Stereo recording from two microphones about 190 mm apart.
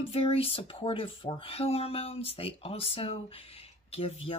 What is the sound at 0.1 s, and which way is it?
Speech, 30° left (ahead or behind).